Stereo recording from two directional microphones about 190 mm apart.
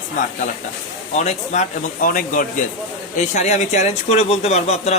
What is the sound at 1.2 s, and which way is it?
A woman's voice, 40° left (ahead or behind).